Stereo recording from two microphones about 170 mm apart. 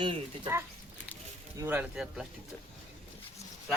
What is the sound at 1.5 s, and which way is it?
Speech, 15° right (ahead or behind).